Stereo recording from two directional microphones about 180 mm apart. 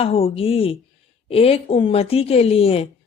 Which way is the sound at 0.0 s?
35° left (ahead or behind).